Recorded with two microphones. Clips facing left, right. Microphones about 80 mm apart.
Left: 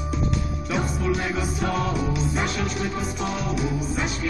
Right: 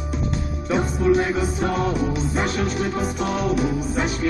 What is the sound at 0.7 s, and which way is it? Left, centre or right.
Music, right.